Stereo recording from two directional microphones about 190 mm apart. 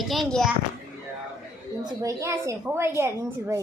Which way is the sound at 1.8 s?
15° right (ahead or behind).